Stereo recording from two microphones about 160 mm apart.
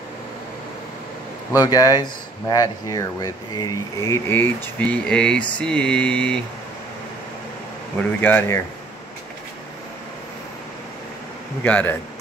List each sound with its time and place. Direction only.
1.6 s speech: 25° left (ahead or behind); by 5.4 s 5° left (ahead or behind)
5.6 s mantra: 5° left (ahead or behind)
8.2 s mantra: 10° left (ahead or behind)
11.6 s mantra: 10° left (ahead or behind)